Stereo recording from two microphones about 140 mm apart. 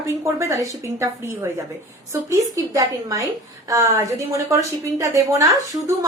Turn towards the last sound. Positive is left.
turn(degrees=-25)  # may be behind; listen again after turning